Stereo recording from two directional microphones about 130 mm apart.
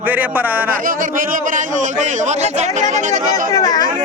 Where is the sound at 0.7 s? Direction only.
90° right; by 3.2 s 70° right (ahead or behind).